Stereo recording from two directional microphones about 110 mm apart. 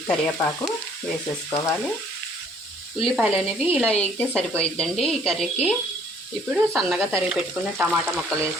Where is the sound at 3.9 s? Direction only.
15° left (ahead or behind).